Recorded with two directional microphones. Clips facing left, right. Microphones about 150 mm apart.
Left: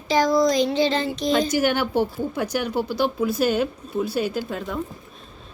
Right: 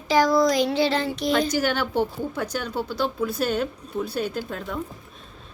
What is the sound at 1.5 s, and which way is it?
A woman's voice, 15° left (ahead or behind).